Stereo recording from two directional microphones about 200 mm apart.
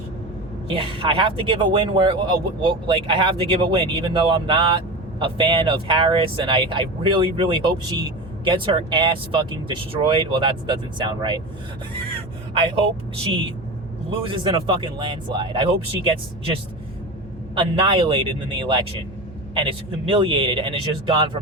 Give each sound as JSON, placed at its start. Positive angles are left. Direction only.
{"t": 0.7, "sound": "speech", "side_deg": -25}
{"t": 14.1, "sound": "speech", "side_deg": -25}